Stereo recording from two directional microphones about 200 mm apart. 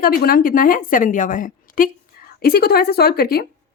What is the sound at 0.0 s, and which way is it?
A woman's voice, 45° left (ahead or behind).